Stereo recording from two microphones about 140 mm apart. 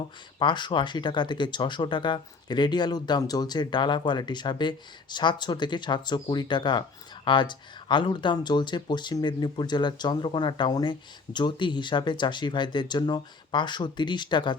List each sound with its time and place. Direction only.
0.3 s speech: 35° left (ahead or behind)